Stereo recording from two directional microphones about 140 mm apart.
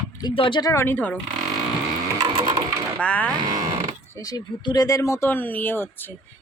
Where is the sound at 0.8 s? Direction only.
15° left (ahead or behind).